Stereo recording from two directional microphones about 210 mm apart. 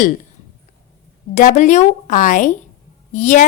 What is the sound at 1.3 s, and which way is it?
A woman's voice, 35° left (ahead or behind).